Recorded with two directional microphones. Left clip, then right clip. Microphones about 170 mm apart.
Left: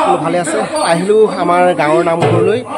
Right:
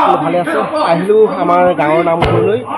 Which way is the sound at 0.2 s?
20° left (ahead or behind).